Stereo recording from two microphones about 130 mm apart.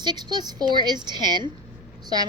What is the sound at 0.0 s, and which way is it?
Speech, 35° right (ahead or behind).